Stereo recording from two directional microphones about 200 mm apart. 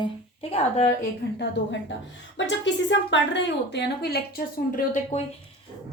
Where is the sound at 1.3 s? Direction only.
65° left (ahead or behind); by 5.2 s 40° left (ahead or behind).